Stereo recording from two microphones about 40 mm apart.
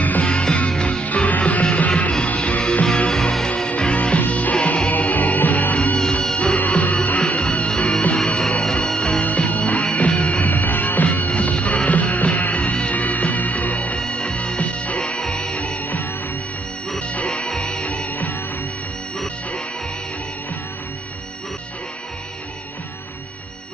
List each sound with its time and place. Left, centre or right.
0.2 s music: left
1.0 s music: left
3.1 s music: centre
3.4 s music: left
5.9 s music: centre
9.2 s music: left
13.9 s music: left
15.2 s music: centre
15.5 s music: left
15.8 s music: left
17.5 s music: centre